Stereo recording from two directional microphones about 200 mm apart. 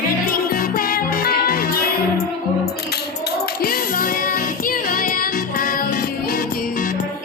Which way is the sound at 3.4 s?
45° left (ahead or behind).